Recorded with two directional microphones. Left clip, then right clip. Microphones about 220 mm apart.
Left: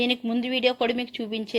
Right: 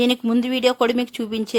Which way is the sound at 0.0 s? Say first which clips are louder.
Right 6 dB; 25° right (ahead or behind).